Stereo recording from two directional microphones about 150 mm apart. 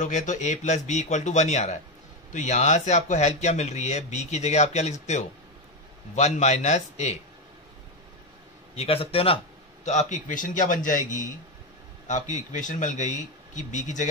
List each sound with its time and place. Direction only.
0.0 s speech: 55° left (ahead or behind)
8.7 s speech: 40° left (ahead or behind)
9.8 s a man's voice: 55° left (ahead or behind)